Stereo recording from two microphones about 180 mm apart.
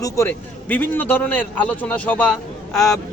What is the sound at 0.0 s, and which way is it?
A man's voice, 15° left (ahead or behind).